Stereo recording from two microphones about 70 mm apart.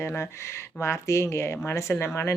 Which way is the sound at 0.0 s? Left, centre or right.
Left.